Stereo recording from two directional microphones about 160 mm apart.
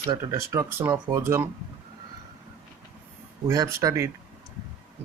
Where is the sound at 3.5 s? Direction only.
20° right (ahead or behind).